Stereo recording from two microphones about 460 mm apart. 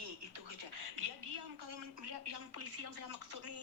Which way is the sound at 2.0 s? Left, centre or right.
Right.